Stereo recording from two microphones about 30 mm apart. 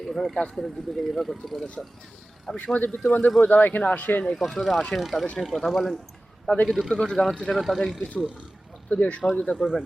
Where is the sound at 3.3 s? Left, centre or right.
Left.